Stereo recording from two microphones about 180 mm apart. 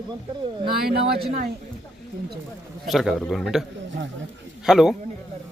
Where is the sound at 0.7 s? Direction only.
60° right (ahead or behind).